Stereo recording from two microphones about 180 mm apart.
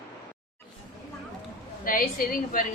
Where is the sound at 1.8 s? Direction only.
50° left (ahead or behind).